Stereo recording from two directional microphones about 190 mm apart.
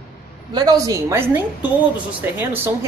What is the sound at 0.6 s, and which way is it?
Speech, 20° right (ahead or behind).